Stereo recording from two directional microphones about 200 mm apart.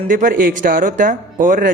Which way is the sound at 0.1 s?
40° right (ahead or behind).